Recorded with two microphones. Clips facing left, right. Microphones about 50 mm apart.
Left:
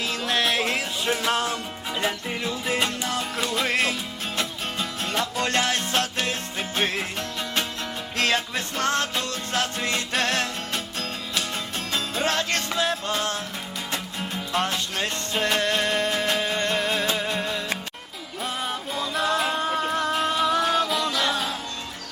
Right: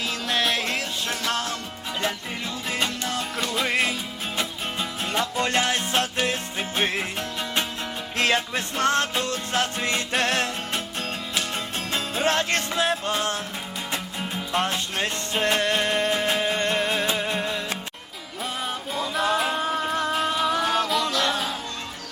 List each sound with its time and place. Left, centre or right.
0.0 s music: centre
1.0 s music: centre
8.8 s music: right
9.6 s music: centre
11.9 s music: right
13.9 s music: centre
14.9 s music: right; by 21.5 s centre